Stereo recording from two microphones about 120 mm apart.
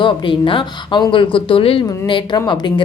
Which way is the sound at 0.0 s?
45° left (ahead or behind).